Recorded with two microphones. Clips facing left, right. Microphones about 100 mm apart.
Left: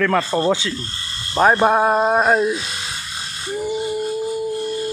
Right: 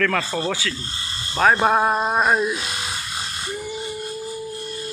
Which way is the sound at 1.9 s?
25° left (ahead or behind).